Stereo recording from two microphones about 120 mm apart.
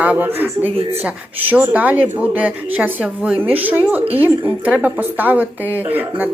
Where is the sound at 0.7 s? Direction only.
55° right (ahead or behind).